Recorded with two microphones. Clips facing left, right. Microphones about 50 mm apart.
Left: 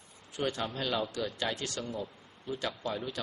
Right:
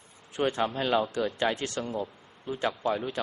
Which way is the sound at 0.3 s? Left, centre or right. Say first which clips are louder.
Right 6 dB; right.